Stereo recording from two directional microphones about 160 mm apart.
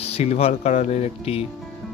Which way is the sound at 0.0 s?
40° left (ahead or behind).